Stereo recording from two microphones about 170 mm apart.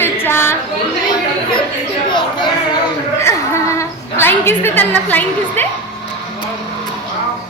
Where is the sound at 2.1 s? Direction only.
25° left (ahead or behind).